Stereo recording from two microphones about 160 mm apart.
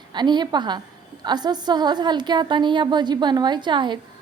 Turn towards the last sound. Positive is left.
turn(degrees=-30)  # may be behind; listen again after turning